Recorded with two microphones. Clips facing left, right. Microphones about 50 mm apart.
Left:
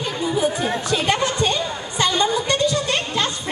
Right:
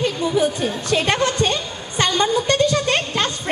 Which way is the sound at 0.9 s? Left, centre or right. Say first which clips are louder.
Right 3 dB; right.